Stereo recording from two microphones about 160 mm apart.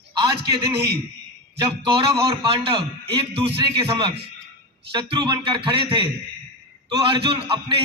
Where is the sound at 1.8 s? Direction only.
30° right (ahead or behind).